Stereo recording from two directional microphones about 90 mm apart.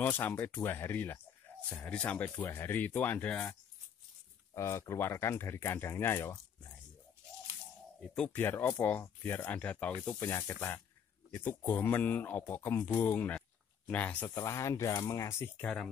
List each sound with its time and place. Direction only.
0.0 s speech: 20° left (ahead or behind)
1.7 s speech: 10° left (ahead or behind)
4.6 s speech: 30° left (ahead or behind)
6.2 s a sound: 35° left (ahead or behind)
8.0 s speech: 5° left (ahead or behind)
8.3 s speech: 25° left (ahead or behind)
14.3 s speech: 35° left (ahead or behind)
15.6 s speech: 5° left (ahead or behind)